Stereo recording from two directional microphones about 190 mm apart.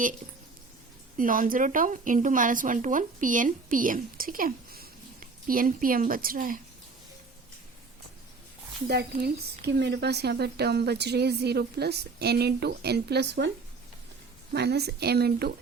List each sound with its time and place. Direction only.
1.1 s a woman's voice: 45° right (ahead or behind)
8.9 s a woman's voice: 55° right (ahead or behind)
14.5 s a woman's voice: 60° right (ahead or behind)